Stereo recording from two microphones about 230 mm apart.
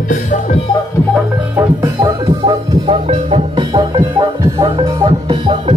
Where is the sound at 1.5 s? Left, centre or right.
Centre.